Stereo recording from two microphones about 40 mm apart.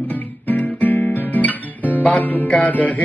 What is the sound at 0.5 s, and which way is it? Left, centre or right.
Guitar, left.